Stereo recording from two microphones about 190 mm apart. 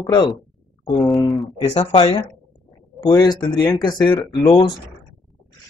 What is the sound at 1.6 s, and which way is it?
Speech, 35° left (ahead or behind).